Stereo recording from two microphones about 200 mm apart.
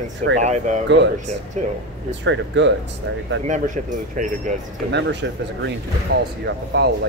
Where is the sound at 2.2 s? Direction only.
65° right (ahead or behind).